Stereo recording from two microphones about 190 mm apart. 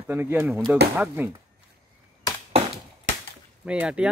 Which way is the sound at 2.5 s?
30° right (ahead or behind).